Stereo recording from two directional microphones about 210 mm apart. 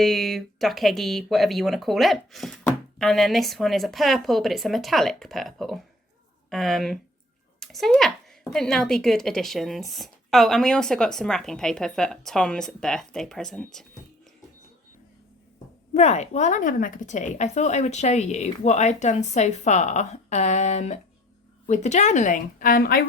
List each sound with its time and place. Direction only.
0.0 s speech: centre (ahead or behind)
15.5 s a woman's voice: 30° left (ahead or behind)